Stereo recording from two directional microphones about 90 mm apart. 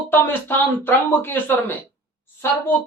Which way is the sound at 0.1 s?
25° left (ahead or behind).